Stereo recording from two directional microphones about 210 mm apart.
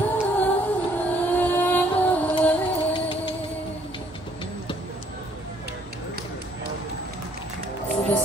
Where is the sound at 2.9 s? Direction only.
25° left (ahead or behind).